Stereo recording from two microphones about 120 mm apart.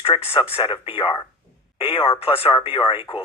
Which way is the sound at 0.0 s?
55° left (ahead or behind).